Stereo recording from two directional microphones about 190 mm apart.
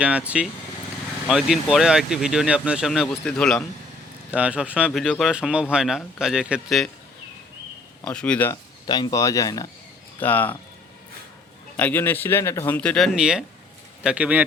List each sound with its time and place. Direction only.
0.0 s speech: 5° right (ahead or behind)
4.3 s speech: 5° right (ahead or behind)
8.0 s speech: 5° left (ahead or behind)
8.9 s speech: 20° left (ahead or behind)
11.8 s speech: 10° left (ahead or behind); by 14.4 s 5° right (ahead or behind)